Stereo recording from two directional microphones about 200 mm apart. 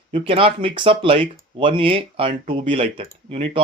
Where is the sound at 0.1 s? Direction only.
25° right (ahead or behind).